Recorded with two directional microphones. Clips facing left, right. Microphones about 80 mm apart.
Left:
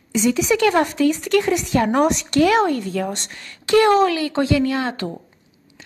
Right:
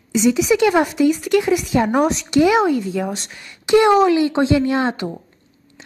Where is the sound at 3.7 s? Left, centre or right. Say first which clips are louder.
Right 2 dB; centre.